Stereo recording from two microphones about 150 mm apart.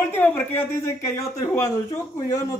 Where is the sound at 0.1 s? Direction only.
15° left (ahead or behind).